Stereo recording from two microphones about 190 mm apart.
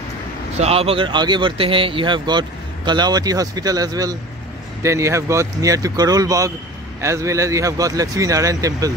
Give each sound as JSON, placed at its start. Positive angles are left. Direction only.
{"t": 0.6, "sound": "speech", "side_deg": -30}